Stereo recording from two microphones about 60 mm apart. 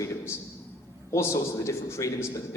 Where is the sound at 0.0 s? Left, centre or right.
Left.